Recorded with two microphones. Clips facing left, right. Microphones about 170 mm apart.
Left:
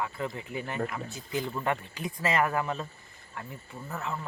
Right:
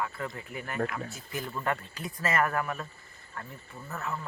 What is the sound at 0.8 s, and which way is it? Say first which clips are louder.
Speech: right 4 dB; 5° left (ahead or behind).